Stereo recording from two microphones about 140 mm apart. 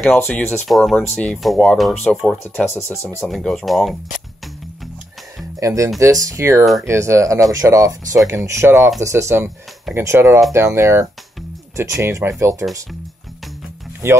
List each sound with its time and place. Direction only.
0.0 s speech: 15° left (ahead or behind)
0.7 s speech: centre (ahead or behind)
2.4 s speech: 15° left (ahead or behind)
3.3 s speech: centre (ahead or behind)
5.6 s speech: 25° right (ahead or behind)
6.6 s speech: centre (ahead or behind)
6.9 s speech: 20° right (ahead or behind)